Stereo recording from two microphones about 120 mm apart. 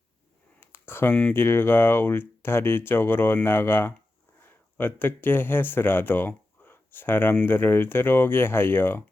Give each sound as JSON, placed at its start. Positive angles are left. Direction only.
{"t": 0.6, "sound": "speech", "side_deg": 20}